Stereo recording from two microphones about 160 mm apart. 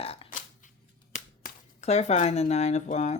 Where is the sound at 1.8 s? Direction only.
45° left (ahead or behind).